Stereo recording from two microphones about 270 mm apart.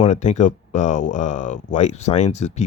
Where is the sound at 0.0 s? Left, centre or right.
Left.